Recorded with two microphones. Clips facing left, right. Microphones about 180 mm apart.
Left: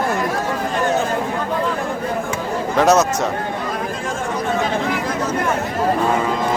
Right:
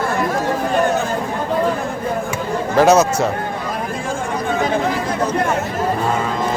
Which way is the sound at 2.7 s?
Centre (ahead or behind).